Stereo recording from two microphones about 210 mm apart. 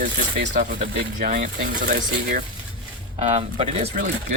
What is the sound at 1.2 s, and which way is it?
Speech, 40° right (ahead or behind).